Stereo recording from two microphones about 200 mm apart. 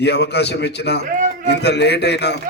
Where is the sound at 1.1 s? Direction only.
40° right (ahead or behind).